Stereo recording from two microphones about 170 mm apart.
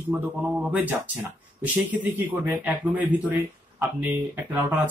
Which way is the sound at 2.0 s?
10° right (ahead or behind).